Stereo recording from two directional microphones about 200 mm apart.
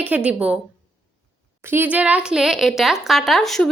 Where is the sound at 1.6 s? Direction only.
10° right (ahead or behind).